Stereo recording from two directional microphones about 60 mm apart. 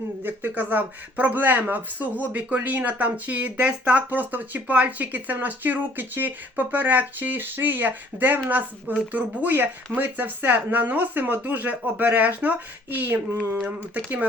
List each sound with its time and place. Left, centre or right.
0.2 s speech: right